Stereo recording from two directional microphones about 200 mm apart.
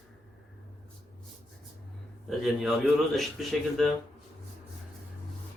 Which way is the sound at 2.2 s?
Centre (ahead or behind).